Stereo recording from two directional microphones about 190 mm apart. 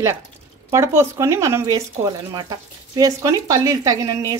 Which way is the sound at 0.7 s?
15° right (ahead or behind).